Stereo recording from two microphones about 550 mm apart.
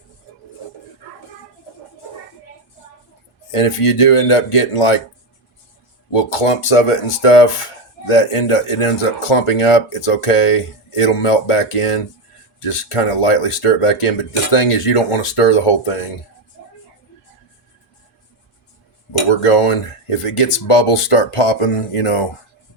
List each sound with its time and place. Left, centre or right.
3.5 s speech: left
6.1 s speech: left
19.3 s speech: left